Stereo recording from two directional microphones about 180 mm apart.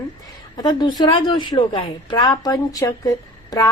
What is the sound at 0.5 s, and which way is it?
A woman's voice, 25° left (ahead or behind).